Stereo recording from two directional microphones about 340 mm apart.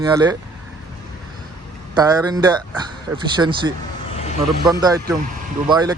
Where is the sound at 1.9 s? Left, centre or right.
Centre.